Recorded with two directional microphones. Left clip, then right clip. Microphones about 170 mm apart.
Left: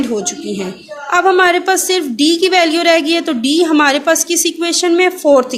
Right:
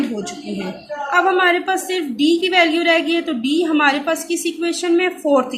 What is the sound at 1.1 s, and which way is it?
A woman's voice, 60° left (ahead or behind).